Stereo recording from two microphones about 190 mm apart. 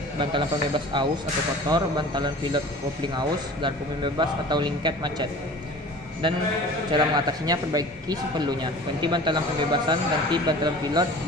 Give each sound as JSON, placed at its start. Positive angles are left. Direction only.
{"t": 0.2, "sound": "a man's voice", "side_deg": -25}
{"t": 6.9, "sound": "a man's voice", "side_deg": -20}